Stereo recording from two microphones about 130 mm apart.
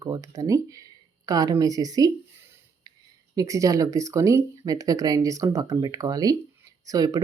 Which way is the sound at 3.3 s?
25° right (ahead or behind).